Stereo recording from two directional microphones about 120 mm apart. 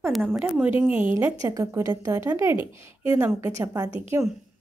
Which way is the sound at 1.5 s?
25° right (ahead or behind).